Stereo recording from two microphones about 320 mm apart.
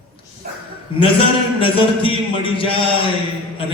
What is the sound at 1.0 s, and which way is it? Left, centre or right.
A man's voice, centre.